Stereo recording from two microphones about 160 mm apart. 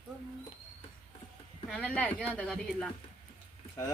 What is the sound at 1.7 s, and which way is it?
Speech, 10° left (ahead or behind).